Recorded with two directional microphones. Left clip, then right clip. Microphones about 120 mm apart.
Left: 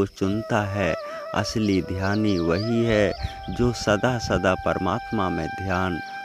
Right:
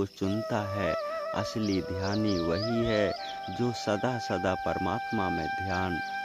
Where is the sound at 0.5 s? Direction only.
45° left (ahead or behind).